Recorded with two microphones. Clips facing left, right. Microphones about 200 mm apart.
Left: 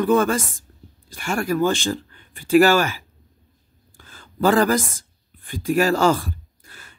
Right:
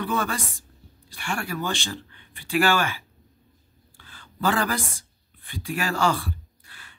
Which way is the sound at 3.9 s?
45° left (ahead or behind).